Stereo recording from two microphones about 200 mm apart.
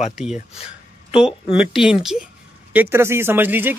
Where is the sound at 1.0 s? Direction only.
5° right (ahead or behind).